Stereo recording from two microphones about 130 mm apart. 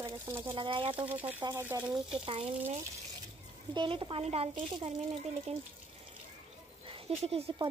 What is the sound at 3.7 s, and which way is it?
Speech, 35° right (ahead or behind).